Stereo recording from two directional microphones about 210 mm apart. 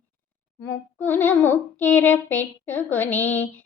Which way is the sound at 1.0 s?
10° left (ahead or behind).